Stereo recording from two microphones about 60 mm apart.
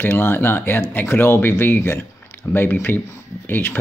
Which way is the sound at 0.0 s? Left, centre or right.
Left.